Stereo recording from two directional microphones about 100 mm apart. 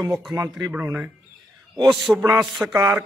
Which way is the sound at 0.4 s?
30° right (ahead or behind).